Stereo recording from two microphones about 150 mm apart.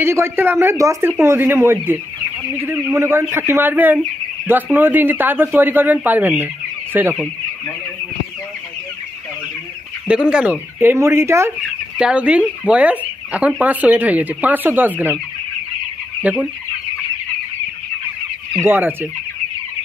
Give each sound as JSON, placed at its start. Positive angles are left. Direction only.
{"t": 0.0, "sound": "speech", "side_deg": -15}
{"t": 10.0, "sound": "speech", "side_deg": -5}
{"t": 12.0, "sound": "speech", "side_deg": -5}
{"t": 16.2, "sound": "fowl", "side_deg": -10}
{"t": 18.6, "sound": "speech", "side_deg": -15}